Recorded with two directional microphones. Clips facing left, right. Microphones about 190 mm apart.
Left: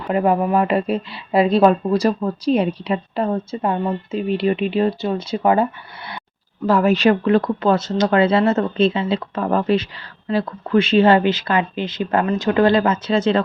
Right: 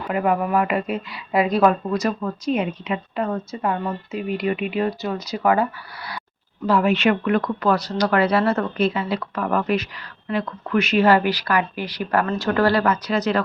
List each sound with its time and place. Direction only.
0.1 s speech: 30° left (ahead or behind)
6.7 s speech: 45° left (ahead or behind); by 13.4 s 25° left (ahead or behind)